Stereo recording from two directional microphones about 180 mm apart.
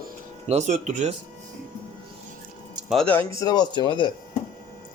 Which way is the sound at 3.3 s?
20° left (ahead or behind).